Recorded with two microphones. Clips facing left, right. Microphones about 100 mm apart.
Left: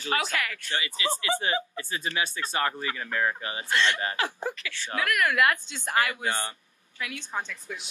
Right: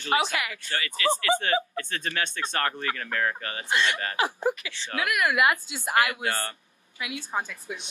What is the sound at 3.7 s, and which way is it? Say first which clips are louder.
A woman's voice: even; 15° right (ahead or behind).